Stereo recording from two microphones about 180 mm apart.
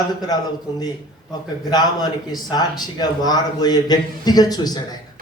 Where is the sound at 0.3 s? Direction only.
20° left (ahead or behind).